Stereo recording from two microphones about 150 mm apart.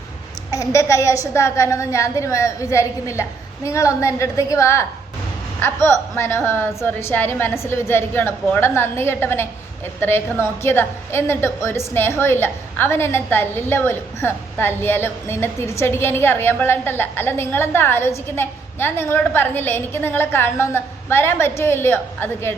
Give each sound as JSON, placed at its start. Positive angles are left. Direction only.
{"t": 0.5, "sound": "a woman's voice", "side_deg": 20}